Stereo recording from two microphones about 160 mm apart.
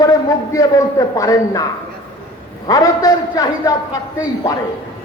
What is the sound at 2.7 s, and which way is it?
A man's voice, 25° left (ahead or behind).